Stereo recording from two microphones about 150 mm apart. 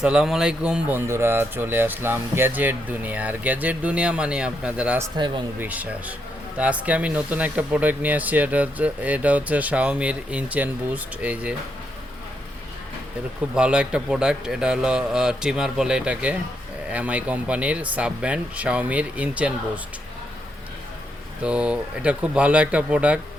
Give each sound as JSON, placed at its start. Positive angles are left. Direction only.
{"t": 0.0, "sound": "speech", "side_deg": -5}
{"t": 5.1, "sound": "speech", "side_deg": -30}
{"t": 5.5, "sound": "speech", "side_deg": -10}
{"t": 13.5, "sound": "a man's voice", "side_deg": -5}
{"t": 21.4, "sound": "speech", "side_deg": -10}